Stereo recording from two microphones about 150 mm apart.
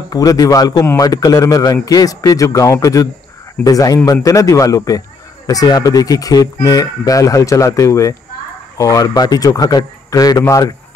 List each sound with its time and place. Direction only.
0.1 s speech: 25° left (ahead or behind)